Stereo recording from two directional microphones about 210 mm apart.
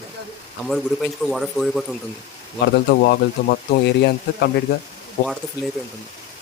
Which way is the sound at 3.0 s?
50° left (ahead or behind).